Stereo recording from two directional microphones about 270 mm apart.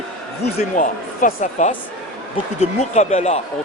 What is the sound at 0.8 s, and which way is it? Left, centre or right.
Speech, left.